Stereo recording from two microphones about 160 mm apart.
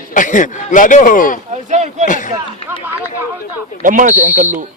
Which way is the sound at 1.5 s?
45° right (ahead or behind).